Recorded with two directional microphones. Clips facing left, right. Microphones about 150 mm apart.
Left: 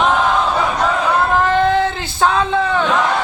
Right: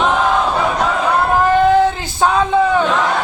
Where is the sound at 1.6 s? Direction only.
10° right (ahead or behind).